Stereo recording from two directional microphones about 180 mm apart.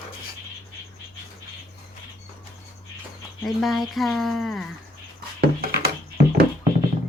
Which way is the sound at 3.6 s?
Centre (ahead or behind).